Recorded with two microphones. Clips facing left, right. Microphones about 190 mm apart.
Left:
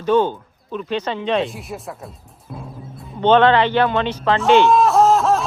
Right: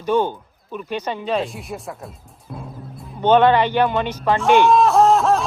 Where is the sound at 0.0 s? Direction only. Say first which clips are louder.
Left 3 dB; 10° right (ahead or behind).